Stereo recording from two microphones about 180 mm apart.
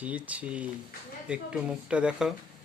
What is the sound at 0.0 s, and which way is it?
Speech, 10° right (ahead or behind).